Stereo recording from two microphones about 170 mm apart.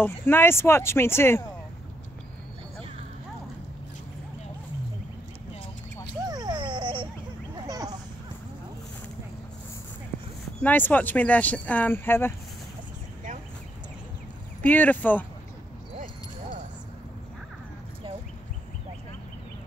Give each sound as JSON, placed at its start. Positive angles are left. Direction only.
{"t": 0.0, "sound": "speech", "side_deg": 15}
{"t": 6.2, "sound": "music", "side_deg": -25}
{"t": 7.6, "sound": "a sound", "side_deg": -20}
{"t": 10.6, "sound": "speech", "side_deg": 10}
{"t": 14.6, "sound": "speech", "side_deg": 10}